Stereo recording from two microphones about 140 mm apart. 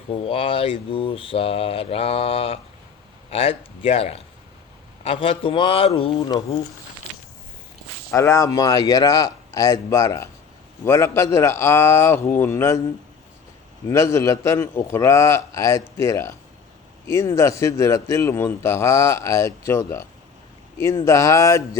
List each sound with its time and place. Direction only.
0.2 s speech: 40° left (ahead or behind)
8.1 s a man's voice: 20° left (ahead or behind)
13.8 s speech: 20° left (ahead or behind)